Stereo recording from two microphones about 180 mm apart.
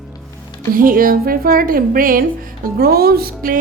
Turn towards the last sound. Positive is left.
turn(degrees=-55)  # may be behind; listen again after turning